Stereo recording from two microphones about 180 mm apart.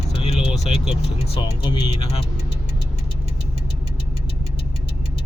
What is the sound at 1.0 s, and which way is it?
Speech, 35° left (ahead or behind).